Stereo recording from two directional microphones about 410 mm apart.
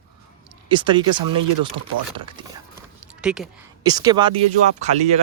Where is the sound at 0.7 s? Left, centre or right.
Centre.